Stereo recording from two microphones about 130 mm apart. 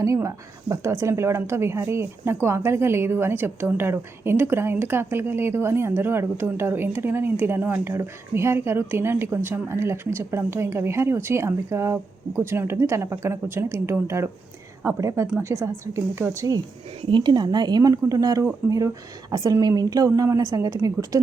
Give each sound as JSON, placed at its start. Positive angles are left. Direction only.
{"t": 0.0, "sound": "speech", "side_deg": -25}
{"t": 17.1, "sound": "speech", "side_deg": -35}